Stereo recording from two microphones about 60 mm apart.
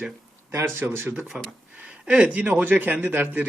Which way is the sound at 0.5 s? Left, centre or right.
Right.